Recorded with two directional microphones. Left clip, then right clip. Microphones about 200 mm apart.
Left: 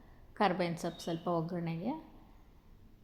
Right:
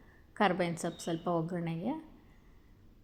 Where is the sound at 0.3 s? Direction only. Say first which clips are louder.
Right 1 dB; 15° right (ahead or behind).